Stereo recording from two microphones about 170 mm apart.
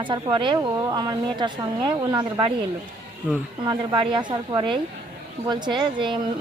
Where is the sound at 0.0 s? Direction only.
30° right (ahead or behind).